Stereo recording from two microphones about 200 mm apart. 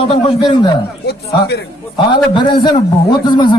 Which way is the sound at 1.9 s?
25° left (ahead or behind).